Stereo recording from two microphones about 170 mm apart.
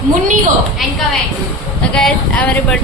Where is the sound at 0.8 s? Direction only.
Centre (ahead or behind).